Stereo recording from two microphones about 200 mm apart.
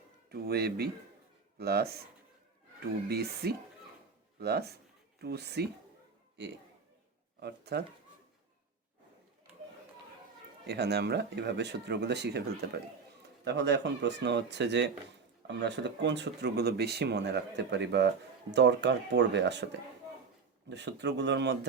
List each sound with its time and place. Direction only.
0.3 s speech: 50° right (ahead or behind)
3.1 s speech: 55° right (ahead or behind)
7.3 s speech: 55° right (ahead or behind)
10.7 s speech: 55° right (ahead or behind)
13.4 s speech: 60° right (ahead or behind)
20.7 s speech: 60° right (ahead or behind)